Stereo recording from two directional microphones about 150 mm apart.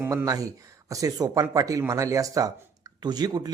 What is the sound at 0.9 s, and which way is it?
Speech, 25° right (ahead or behind).